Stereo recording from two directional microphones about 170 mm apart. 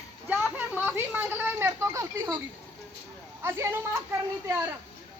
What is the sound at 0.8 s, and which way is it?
Speech, 10° right (ahead or behind).